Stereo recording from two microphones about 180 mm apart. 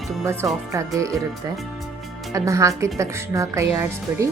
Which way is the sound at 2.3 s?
15° right (ahead or behind).